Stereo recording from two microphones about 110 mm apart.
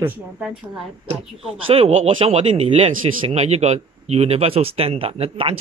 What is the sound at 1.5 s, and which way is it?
Speech, 60° right (ahead or behind).